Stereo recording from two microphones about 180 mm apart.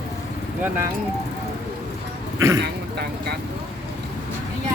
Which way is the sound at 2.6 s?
65° right (ahead or behind).